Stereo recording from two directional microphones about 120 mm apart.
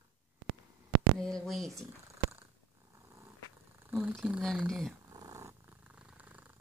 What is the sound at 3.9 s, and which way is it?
Speech, 15° right (ahead or behind).